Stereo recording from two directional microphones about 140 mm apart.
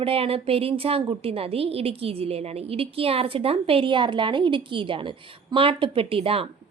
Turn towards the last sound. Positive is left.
turn(degrees=-45)  # may be behind; listen again after turning